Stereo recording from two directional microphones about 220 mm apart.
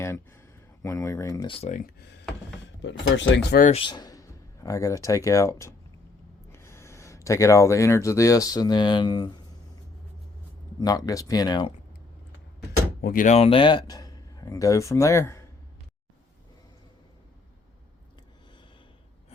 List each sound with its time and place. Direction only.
0.0 s a sound: 10° left (ahead or behind)
0.8 s speech: 15° left (ahead or behind); by 2.0 s 35° left (ahead or behind)
2.8 s speech: 55° left (ahead or behind)
3.6 s speech: 25° left (ahead or behind)
10.8 s speech: 15° left (ahead or behind)
13.0 s speech: 40° left (ahead or behind); by 15.4 s 15° left (ahead or behind)